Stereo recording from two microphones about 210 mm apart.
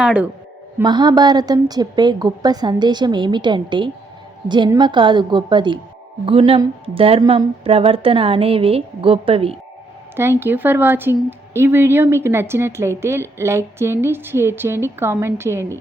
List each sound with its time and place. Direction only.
0.0 s speech: 5° right (ahead or behind)
0.8 s a woman's voice: 20° right (ahead or behind)
10.2 s speech: 10° right (ahead or behind)